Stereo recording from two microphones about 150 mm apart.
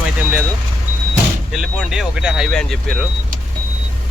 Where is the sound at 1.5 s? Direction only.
5° right (ahead or behind).